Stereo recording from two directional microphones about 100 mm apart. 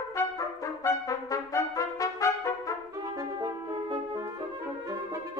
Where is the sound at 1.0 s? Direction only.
35° left (ahead or behind).